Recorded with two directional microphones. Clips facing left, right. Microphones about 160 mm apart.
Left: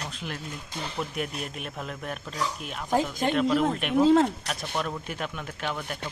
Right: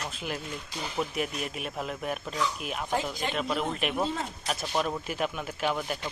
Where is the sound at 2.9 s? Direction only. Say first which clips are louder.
Left 6 dB; 45° left (ahead or behind).